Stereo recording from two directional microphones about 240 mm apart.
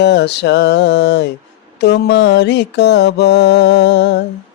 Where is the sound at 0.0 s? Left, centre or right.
Left.